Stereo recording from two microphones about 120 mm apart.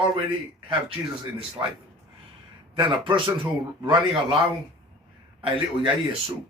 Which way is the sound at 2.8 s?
45° right (ahead or behind).